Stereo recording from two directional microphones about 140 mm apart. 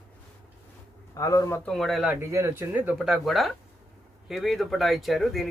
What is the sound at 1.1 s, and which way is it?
Speech, 25° left (ahead or behind).